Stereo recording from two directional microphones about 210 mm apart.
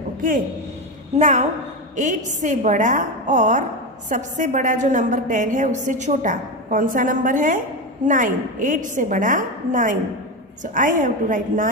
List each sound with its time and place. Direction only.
1.1 s a woman's voice: 35° right (ahead or behind)